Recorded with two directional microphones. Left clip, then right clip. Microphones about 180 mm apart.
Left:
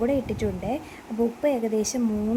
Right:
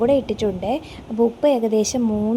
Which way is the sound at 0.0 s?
20° right (ahead or behind).